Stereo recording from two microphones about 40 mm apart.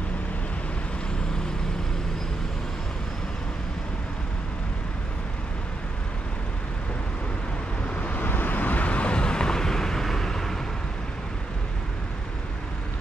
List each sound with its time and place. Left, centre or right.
7.9 s vehicle: left
8.3 s vehicle: left; by 10.6 s centre